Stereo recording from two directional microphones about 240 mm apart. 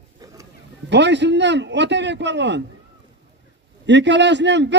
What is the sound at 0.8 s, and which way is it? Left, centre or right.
A man's voice, right.